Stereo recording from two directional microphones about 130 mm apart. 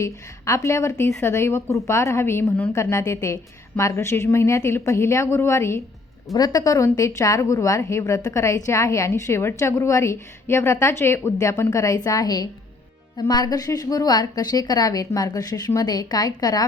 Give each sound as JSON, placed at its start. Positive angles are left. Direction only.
{"t": 0.0, "sound": "speech", "side_deg": 25}